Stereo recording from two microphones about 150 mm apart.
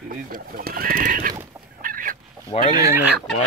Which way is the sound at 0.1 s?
70° right (ahead or behind).